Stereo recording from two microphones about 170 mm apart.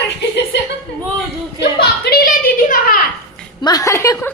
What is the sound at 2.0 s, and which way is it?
A woman's voice, 65° left (ahead or behind).